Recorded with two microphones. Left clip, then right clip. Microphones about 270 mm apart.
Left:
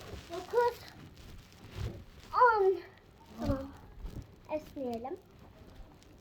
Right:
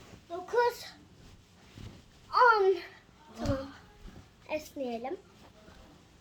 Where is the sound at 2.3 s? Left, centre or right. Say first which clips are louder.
Right 2 dB; centre.